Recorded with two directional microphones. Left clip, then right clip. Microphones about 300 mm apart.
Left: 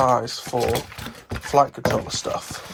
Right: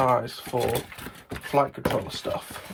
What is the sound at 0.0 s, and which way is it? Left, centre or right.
Speech, centre.